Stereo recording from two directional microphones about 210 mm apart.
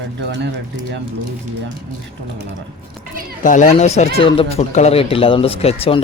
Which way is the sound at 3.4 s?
35° left (ahead or behind).